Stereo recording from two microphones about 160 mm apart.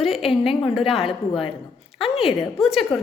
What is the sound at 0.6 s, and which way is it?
Speech, centre (ahead or behind).